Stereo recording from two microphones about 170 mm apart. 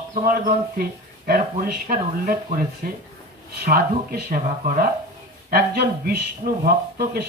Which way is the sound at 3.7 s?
60° right (ahead or behind).